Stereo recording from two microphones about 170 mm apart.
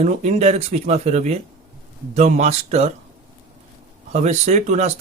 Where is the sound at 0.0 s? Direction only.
40° right (ahead or behind).